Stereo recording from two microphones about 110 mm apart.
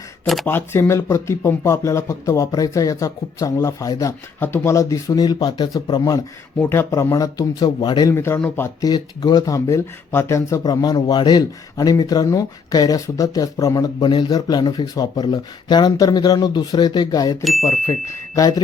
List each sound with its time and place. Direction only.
0.4 s speech: 20° left (ahead or behind)
4.4 s speech: 20° left (ahead or behind)
6.6 s speech: 20° left (ahead or behind); by 8.1 s 35° left (ahead or behind)
8.1 s speech: 25° left (ahead or behind)
8.8 s speech: 35° left (ahead or behind)
17.4 s speech: centre (ahead or behind)
17.7 s speech: 25° left (ahead or behind)